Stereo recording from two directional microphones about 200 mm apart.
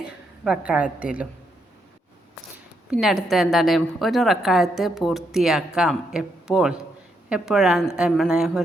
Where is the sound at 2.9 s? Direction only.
Centre (ahead or behind).